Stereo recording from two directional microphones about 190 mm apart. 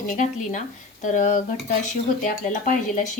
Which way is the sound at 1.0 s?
40° left (ahead or behind).